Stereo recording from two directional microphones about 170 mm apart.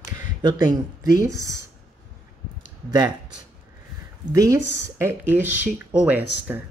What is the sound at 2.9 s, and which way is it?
Speech, 25° right (ahead or behind).